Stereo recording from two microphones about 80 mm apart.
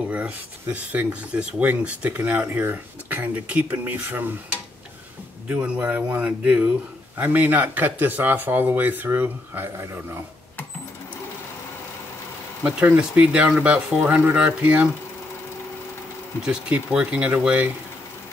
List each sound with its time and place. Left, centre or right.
0.7 s speech: centre
5.5 s speech: centre
12.6 s speech: centre
16.4 s speech: centre